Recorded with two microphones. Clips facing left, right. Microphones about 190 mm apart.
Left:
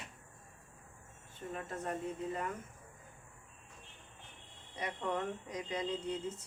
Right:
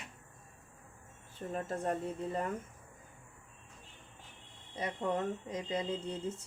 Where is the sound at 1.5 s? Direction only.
35° right (ahead or behind).